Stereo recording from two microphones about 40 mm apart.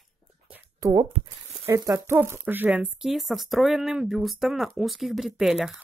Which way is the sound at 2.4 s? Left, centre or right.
Right.